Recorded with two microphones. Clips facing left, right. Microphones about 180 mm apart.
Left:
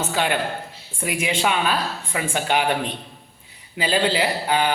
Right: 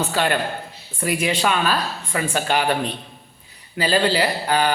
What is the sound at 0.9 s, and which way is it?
A man's voice, 10° left (ahead or behind).